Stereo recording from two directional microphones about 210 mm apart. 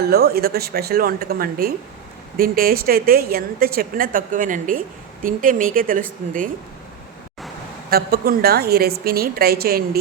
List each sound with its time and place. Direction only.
0.1 s a woman's voice: 50° right (ahead or behind)
7.9 s a woman's voice: 45° right (ahead or behind)